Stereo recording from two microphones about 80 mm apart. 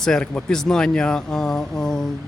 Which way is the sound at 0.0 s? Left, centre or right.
Centre.